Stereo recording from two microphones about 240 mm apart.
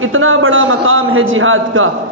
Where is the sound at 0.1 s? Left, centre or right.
Right.